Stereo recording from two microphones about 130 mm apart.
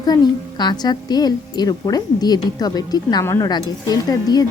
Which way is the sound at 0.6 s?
35° left (ahead or behind).